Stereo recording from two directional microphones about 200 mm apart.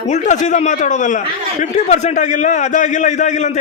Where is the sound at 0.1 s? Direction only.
35° left (ahead or behind).